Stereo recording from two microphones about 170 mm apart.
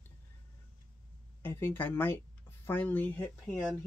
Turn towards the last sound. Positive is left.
turn(degrees=10)  # may be behind; listen again after turning